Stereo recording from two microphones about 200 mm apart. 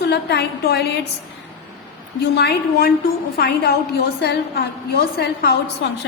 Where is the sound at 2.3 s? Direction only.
55° left (ahead or behind).